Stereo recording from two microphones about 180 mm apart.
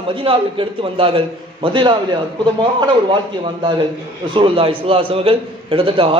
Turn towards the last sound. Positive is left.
turn(degrees=-30)  # may be behind; listen again after turning